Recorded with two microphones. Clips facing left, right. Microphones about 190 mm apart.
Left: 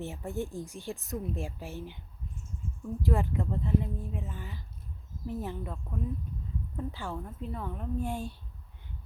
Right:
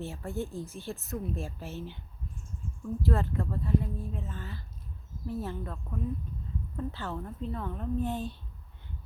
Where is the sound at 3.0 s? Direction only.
15° left (ahead or behind).